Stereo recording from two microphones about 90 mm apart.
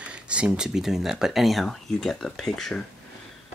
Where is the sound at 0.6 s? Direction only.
5° right (ahead or behind).